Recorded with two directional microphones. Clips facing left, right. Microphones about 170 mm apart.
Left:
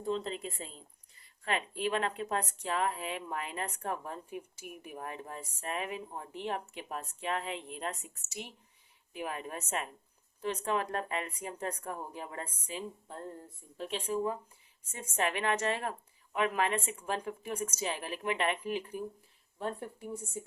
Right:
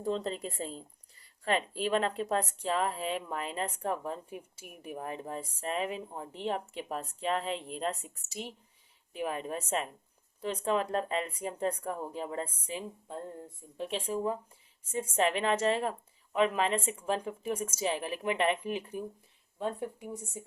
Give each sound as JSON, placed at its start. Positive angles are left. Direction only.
{"t": 0.0, "sound": "a woman's voice", "side_deg": -35}